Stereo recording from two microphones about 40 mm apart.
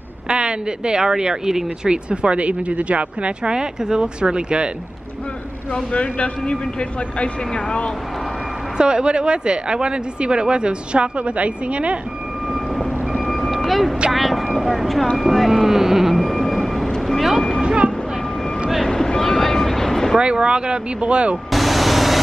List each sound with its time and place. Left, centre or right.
0.3 s speech: right
2.0 s speech: right
5.9 s a man's voice: left
8.7 s speech: right
12.4 s vehicle: centre
15.1 s speech: centre
16.5 s vehicle: centre
18.9 s vehicle: centre
20.2 s speech: right
21.5 s vehicle: centre